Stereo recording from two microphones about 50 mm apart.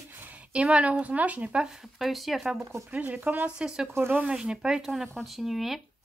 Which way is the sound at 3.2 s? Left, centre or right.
Right.